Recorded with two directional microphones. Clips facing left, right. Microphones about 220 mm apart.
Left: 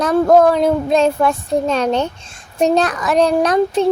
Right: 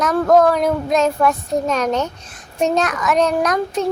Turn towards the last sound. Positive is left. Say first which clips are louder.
# left 5 dB
turn(degrees=30)  # may be behind; listen again after turning